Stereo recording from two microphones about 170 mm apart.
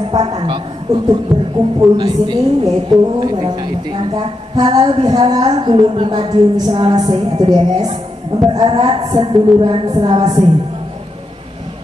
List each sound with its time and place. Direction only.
0.1 s a woman's voice: 30° right (ahead or behind)
1.3 s music: centre (ahead or behind)
1.8 s a woman's voice: 25° right (ahead or behind)